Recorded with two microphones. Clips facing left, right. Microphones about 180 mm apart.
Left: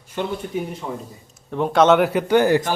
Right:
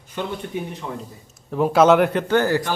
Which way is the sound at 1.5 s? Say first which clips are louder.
Right 1 dB; 5° right (ahead or behind).